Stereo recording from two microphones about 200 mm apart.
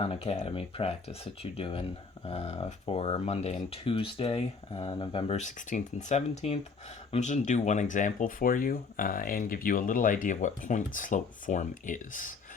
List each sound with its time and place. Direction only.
0.0 s speech: 30° left (ahead or behind)